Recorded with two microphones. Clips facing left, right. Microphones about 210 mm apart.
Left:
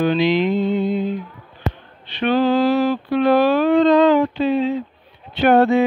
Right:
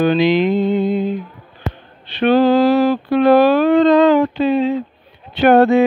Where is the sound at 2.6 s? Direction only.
80° right.